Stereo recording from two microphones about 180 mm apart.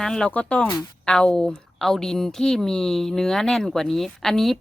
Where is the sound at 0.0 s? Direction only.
5° left (ahead or behind).